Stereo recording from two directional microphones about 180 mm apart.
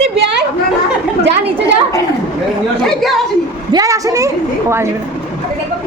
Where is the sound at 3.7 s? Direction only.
20° right (ahead or behind).